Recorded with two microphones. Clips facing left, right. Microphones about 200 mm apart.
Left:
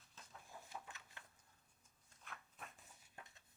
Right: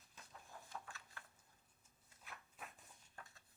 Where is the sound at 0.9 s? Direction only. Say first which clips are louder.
Right 1 dB; 20° left (ahead or behind).